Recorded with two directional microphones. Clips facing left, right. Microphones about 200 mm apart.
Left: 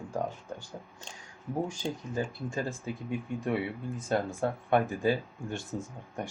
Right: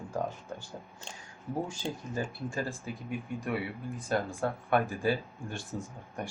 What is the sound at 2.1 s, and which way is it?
Speech, 20° left (ahead or behind).